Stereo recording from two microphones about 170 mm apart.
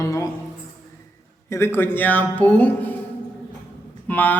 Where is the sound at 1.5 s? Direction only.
15° left (ahead or behind).